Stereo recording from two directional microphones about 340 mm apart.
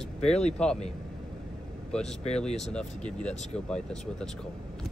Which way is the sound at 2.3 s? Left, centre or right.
Centre.